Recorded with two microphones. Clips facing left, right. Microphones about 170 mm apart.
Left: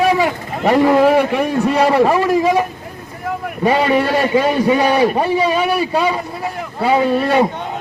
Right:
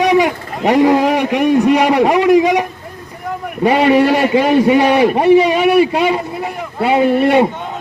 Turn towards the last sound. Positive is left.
turn(degrees=-20)  # may be behind; listen again after turning